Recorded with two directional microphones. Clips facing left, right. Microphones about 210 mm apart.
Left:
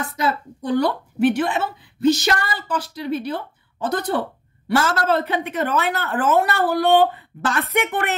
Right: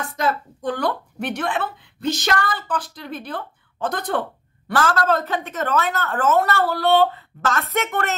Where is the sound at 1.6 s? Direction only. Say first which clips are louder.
Left 6 dB; 60° right (ahead or behind).